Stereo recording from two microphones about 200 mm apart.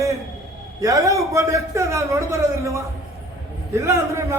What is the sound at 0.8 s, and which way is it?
A man's voice, 15° right (ahead or behind).